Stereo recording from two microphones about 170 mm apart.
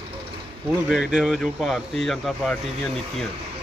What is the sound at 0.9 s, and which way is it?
Speech, 5° right (ahead or behind).